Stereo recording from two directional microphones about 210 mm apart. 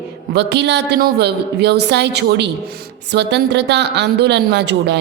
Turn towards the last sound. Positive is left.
turn(degrees=-55)  # may be behind; listen again after turning